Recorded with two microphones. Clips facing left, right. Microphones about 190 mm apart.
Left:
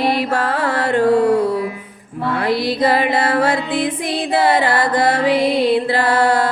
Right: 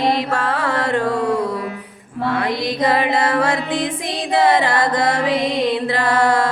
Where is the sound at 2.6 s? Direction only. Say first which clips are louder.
Even; 30° left (ahead or behind).